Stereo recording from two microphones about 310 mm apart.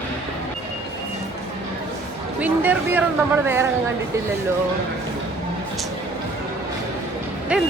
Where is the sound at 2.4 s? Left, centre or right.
Centre.